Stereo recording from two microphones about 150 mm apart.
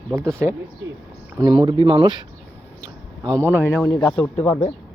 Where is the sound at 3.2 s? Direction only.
20° right (ahead or behind).